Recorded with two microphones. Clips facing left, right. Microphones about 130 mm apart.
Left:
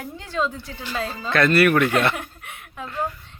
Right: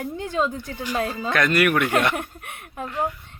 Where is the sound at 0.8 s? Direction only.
15° right (ahead or behind).